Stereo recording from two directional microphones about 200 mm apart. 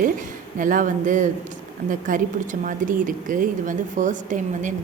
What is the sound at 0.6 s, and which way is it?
A woman's voice, 40° right (ahead or behind).